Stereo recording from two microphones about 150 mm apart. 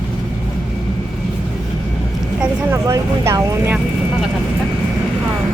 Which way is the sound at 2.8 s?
20° right (ahead or behind).